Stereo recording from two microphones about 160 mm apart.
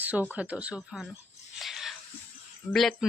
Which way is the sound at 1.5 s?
Centre (ahead or behind).